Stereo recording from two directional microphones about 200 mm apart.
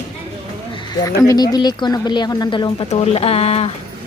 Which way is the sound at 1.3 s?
20° left (ahead or behind).